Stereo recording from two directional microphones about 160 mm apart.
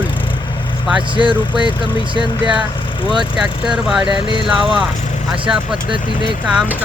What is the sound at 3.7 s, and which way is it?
Speech, 5° right (ahead or behind).